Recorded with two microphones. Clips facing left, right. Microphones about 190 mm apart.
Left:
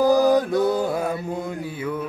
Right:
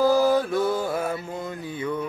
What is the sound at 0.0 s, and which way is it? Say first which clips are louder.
Mantra: left 2 dB; 15° left (ahead or behind).